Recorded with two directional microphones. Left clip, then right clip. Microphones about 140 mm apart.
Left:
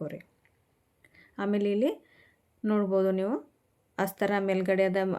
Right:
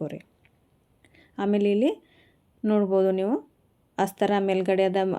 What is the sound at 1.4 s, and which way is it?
A woman's voice, 30° right (ahead or behind).